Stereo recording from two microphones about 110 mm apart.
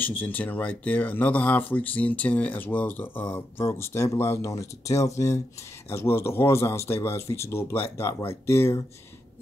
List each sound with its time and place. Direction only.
0.0 s speech: 15° left (ahead or behind)